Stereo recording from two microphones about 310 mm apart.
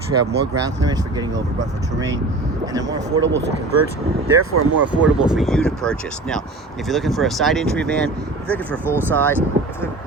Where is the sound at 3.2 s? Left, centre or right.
Right.